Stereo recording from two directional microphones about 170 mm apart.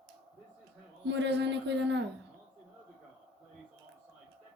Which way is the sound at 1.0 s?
90° right.